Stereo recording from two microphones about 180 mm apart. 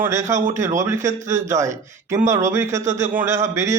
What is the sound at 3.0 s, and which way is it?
Speech, 15° right (ahead or behind).